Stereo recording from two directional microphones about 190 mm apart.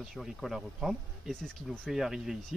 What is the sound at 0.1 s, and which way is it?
Speech, centre (ahead or behind).